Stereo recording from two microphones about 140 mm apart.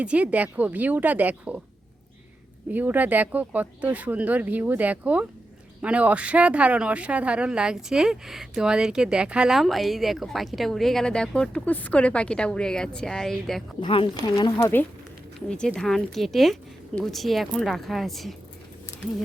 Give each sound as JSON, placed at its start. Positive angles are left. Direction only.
{"t": 0.0, "sound": "speech", "side_deg": -10}
{"t": 2.6, "sound": "speech", "side_deg": -10}
{"t": 13.8, "sound": "speech", "side_deg": 35}
{"t": 14.5, "sound": "speech", "side_deg": 15}